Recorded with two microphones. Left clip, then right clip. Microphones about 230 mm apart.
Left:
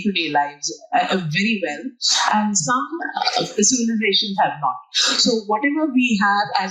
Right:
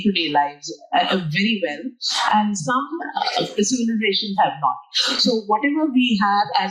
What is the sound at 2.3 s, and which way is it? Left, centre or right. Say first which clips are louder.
Speech: even; left.